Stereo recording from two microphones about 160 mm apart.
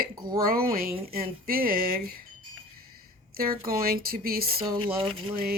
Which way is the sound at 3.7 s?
65° right (ahead or behind).